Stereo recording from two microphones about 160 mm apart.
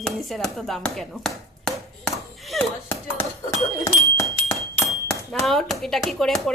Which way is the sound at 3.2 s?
20° left (ahead or behind).